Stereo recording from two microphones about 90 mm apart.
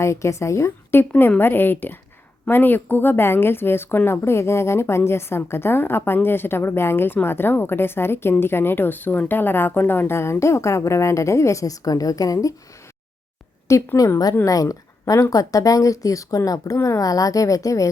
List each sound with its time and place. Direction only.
0.0 s speech: 35° left (ahead or behind)
13.7 s speech: 35° left (ahead or behind)